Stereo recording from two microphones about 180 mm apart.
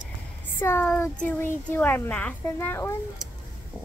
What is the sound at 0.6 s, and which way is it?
Speech, 10° left (ahead or behind).